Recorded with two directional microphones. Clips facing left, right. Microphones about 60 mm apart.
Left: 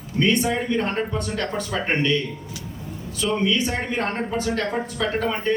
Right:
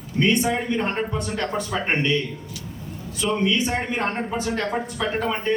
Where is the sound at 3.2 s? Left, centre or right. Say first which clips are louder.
Even; centre.